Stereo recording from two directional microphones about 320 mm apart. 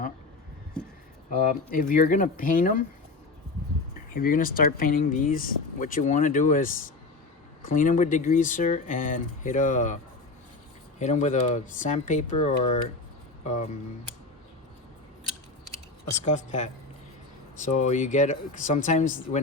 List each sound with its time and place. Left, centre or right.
1.3 s speech: left
4.1 s speech: left
11.0 s speech: left
16.2 s speech: left
17.7 s speech: left